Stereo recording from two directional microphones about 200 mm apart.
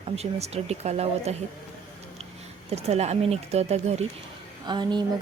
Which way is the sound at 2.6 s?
30° right (ahead or behind).